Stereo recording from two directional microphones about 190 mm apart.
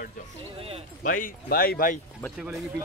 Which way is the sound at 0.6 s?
30° right (ahead or behind).